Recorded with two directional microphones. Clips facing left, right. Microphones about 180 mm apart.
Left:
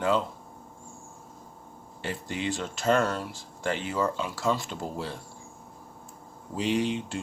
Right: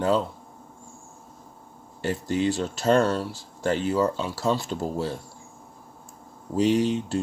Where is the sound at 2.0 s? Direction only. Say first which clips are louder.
Right 7 dB; 40° right (ahead or behind).